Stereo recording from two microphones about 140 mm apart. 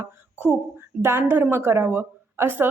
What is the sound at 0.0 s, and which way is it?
A woman's voice, 15° right (ahead or behind).